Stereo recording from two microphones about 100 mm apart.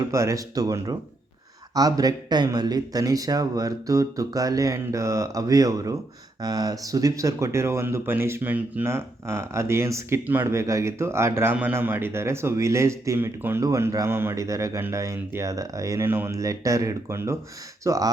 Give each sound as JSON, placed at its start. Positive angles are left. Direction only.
{"t": 0.0, "sound": "speech", "side_deg": -30}